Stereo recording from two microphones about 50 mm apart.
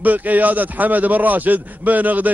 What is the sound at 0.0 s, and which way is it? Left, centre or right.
A man's voice, right.